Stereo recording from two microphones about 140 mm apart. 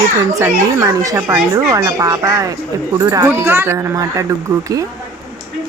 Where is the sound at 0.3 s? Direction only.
20° right (ahead or behind).